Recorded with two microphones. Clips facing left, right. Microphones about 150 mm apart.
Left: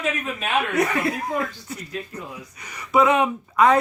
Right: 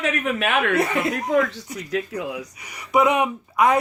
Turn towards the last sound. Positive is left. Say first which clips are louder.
# left 1 dB
turn(degrees=-15)  # may be behind; listen again after turning